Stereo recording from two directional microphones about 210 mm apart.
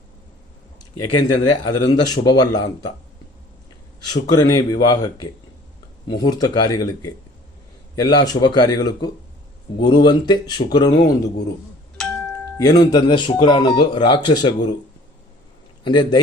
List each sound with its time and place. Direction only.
1.1 s speech: 20° left (ahead or behind)
4.0 s speech: 20° left (ahead or behind)
12.0 s a sound: 5° left (ahead or behind)
12.5 s speech: 20° left (ahead or behind)
15.8 s a man's voice: 20° left (ahead or behind)